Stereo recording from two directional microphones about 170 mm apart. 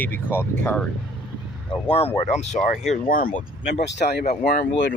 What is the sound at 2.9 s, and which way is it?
Speech, 55° left (ahead or behind).